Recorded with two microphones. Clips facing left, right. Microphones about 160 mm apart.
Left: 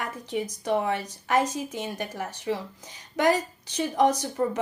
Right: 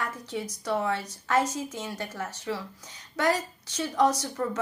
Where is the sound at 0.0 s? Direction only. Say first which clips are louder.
Left 3 dB; 15° left (ahead or behind).